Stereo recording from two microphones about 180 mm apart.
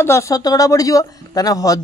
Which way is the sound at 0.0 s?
15° left (ahead or behind).